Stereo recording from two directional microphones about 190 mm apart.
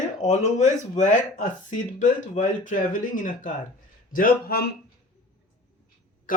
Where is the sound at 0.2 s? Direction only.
35° left (ahead or behind); by 4.7 s 55° left (ahead or behind).